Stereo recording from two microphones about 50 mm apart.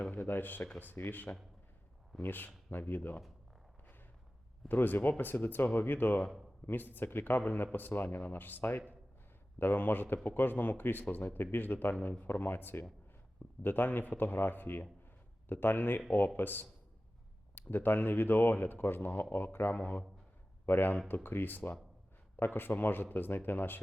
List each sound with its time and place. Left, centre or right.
0.0 s a man's voice: left
4.7 s a man's voice: left